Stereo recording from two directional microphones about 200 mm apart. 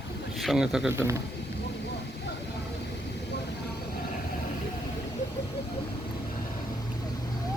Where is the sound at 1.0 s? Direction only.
15° right (ahead or behind).